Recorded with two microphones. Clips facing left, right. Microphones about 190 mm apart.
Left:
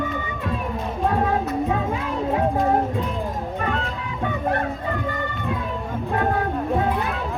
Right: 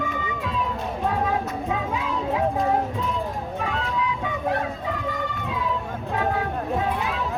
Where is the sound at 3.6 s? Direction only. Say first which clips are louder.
Right 3 dB; 60° left (ahead or behind).